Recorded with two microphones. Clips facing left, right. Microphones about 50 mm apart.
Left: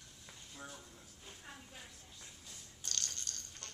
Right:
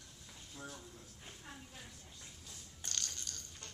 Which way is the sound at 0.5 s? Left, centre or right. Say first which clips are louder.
Right 1 dB; centre.